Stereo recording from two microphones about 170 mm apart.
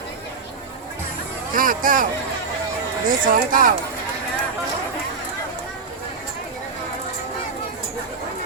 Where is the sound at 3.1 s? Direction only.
55° right (ahead or behind).